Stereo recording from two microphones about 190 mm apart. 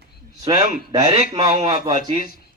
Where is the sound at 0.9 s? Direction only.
20° right (ahead or behind).